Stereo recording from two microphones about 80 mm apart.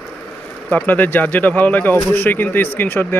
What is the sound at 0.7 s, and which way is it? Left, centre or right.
Speech, left.